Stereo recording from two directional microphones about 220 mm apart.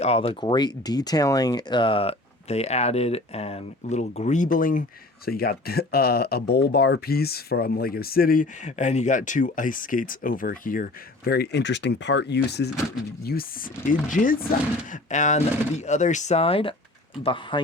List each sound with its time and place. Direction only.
0.0 s speech: 25° left (ahead or behind)